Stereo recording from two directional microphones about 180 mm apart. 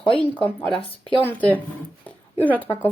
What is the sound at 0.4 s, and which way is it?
Speech, 10° left (ahead or behind).